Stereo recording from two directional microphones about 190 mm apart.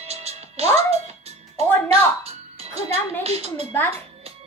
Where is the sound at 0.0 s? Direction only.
35° right (ahead or behind).